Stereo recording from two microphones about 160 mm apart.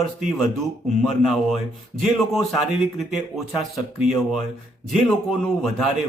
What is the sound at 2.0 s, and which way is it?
Speech, centre (ahead or behind).